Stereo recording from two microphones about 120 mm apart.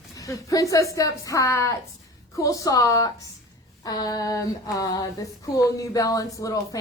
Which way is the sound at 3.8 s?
35° left (ahead or behind).